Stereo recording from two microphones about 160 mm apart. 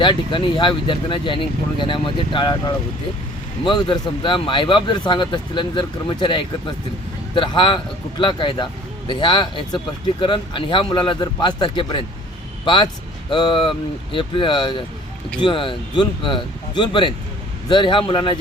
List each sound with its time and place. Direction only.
0.0 s speech: 30° left (ahead or behind)